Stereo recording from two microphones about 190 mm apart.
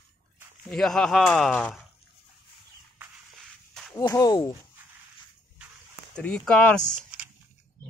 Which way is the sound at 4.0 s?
20° left (ahead or behind).